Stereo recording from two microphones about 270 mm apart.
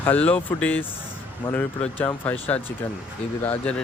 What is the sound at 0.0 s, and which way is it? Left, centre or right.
Speech, centre.